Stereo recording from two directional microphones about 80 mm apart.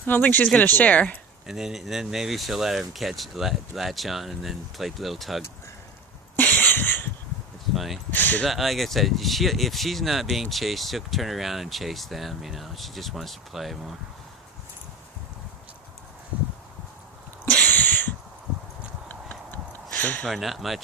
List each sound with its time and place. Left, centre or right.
0.0 s speech: left
1.5 s speech: centre
6.3 s a sound: left
7.7 s speech: centre
8.1 s speech: left
8.4 s speech: centre
17.4 s a sound: left
19.0 s clip-clop: left
20.0 s speech: centre
20.2 s speech: centre